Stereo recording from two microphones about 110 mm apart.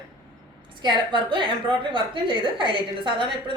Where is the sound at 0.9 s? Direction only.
50° right (ahead or behind).